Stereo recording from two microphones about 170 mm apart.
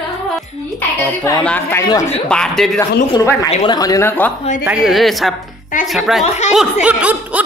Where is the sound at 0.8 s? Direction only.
10° left (ahead or behind).